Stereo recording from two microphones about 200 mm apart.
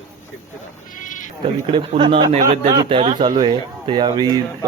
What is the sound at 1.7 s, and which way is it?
Speech, 25° right (ahead or behind).